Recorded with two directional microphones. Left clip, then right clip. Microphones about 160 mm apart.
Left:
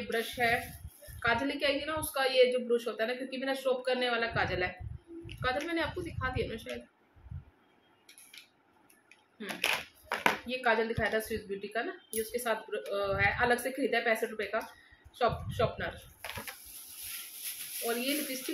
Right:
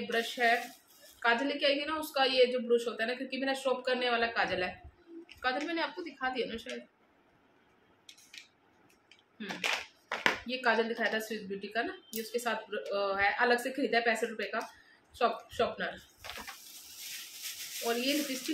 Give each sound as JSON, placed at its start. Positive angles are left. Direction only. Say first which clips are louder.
{"t": 0.1, "sound": "a woman's voice", "louder": "right 1 dB", "side_deg": -10}
{"t": 9.6, "sound": "a sound", "louder": "left 2 dB", "side_deg": 40}
{"t": 10.5, "sound": "speech", "louder": "even", "side_deg": -10}
{"t": 17.9, "sound": "a woman's voice", "louder": "right 1 dB", "side_deg": -5}